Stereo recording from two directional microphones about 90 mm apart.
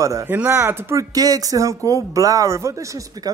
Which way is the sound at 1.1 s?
45° right (ahead or behind).